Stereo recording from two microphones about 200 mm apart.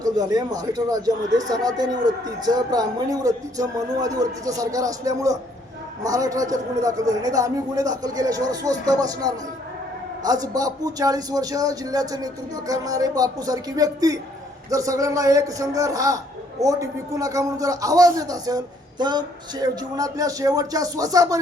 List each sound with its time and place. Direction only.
0.0 s a man's voice: 20° right (ahead or behind)